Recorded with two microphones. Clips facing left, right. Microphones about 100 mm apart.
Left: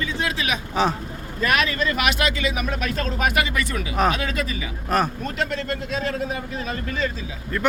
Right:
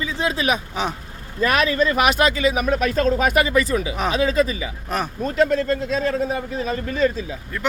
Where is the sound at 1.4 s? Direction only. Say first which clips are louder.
Right 3 dB; 30° right (ahead or behind).